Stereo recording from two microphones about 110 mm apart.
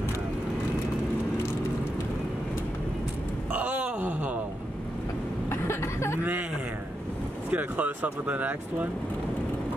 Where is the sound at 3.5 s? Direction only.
15° right (ahead or behind).